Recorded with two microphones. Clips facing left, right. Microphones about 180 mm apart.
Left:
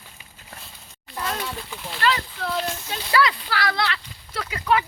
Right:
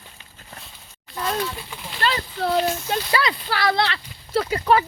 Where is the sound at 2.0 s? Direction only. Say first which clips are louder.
Right 1 dB; 35° right (ahead or behind).